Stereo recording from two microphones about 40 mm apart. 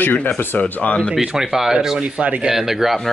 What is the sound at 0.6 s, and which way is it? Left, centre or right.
Speech, left.